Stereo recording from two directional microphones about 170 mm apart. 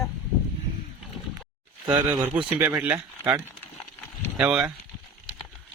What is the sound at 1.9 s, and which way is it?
Speech, 10° right (ahead or behind).